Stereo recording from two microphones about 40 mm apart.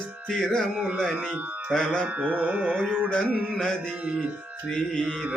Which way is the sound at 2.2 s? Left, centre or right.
Right.